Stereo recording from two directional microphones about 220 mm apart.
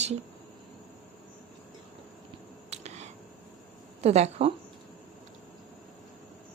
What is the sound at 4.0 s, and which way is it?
Speech, 30° right (ahead or behind).